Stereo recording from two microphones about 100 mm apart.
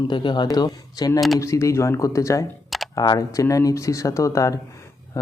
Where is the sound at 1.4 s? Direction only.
30° left (ahead or behind).